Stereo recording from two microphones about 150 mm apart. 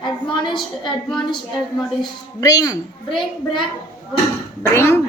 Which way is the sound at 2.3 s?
25° left (ahead or behind).